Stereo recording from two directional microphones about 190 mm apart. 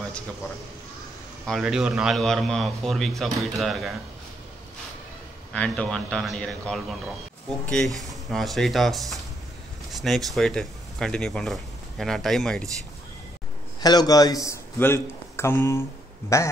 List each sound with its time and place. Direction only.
1.4 s a man's voice: centre (ahead or behind)
5.5 s a man's voice: 5° left (ahead or behind)
13.7 s a man's voice: 20° left (ahead or behind)